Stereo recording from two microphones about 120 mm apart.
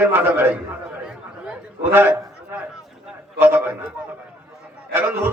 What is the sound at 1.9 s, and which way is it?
Speech, 15° right (ahead or behind).